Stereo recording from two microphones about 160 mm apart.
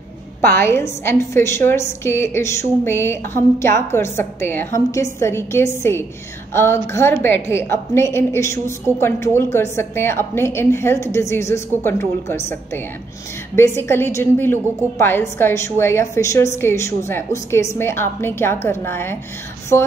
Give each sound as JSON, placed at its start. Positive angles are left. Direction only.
{"t": 0.5, "sound": "a woman's voice", "side_deg": 15}